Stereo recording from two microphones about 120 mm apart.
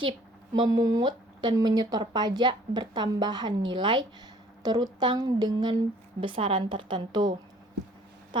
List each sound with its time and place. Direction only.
0.5 s speech: 35° right (ahead or behind)